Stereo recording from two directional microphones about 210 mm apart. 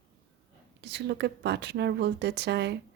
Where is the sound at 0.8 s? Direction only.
55° right (ahead or behind).